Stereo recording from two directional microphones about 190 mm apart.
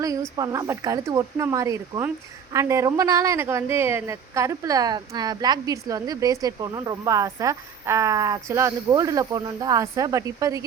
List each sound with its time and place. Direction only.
0.0 s speech: 20° right (ahead or behind)